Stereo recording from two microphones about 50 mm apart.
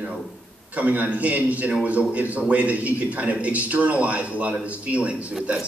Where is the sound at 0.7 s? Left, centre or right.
Right.